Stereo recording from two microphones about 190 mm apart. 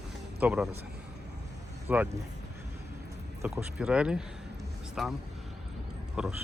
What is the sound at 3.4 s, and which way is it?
Speech, 5° right (ahead or behind).